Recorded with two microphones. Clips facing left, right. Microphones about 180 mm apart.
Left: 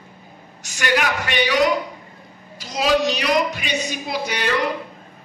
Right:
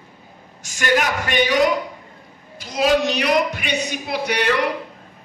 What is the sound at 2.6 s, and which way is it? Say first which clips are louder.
A woman's voice: right 1 dB; 55° right (ahead or behind).